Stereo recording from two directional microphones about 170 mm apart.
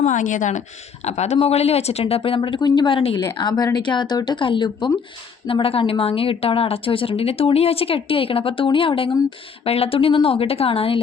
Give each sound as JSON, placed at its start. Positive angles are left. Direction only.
{"t": 0.0, "sound": "a woman's voice", "side_deg": 50}